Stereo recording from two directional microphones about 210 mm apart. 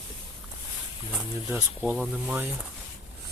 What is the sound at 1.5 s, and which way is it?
Speech, 5° right (ahead or behind).